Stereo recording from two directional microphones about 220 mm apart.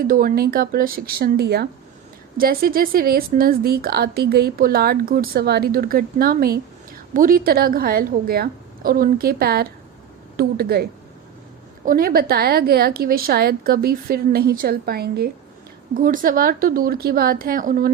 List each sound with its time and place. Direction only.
0.0 s a woman's voice: 40° right (ahead or behind)
11.9 s a woman's voice: 40° right (ahead or behind)